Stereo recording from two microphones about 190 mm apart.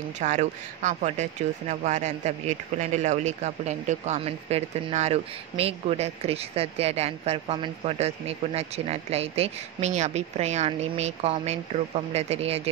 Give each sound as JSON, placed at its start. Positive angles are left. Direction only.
{"t": 0.2, "sound": "speech", "side_deg": -40}